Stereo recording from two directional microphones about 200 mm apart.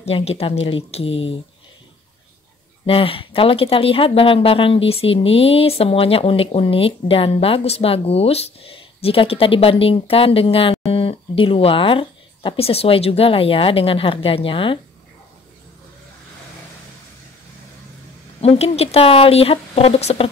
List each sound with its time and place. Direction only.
0.0 s speech: 30° left (ahead or behind)
2.9 s speech: 25° left (ahead or behind)
18.4 s speech: 30° left (ahead or behind)